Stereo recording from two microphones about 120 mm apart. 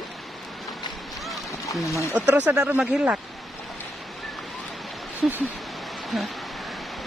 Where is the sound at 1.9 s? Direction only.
25° left (ahead or behind).